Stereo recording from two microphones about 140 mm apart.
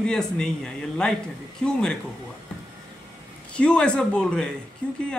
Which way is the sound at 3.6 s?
5° left (ahead or behind).